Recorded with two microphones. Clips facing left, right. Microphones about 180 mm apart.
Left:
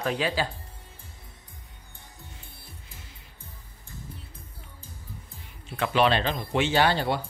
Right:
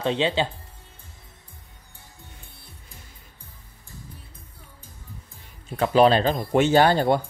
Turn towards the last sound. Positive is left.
turn(degrees=-45)  # may be behind; listen again after turning